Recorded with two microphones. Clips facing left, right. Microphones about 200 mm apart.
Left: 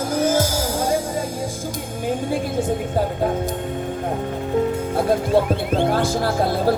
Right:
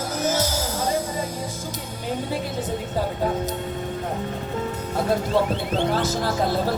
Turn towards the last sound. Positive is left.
turn(degrees=50)  # may be behind; listen again after turning